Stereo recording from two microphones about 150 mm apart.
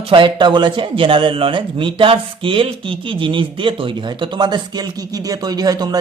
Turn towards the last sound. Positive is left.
turn(degrees=-25)  # may be behind; listen again after turning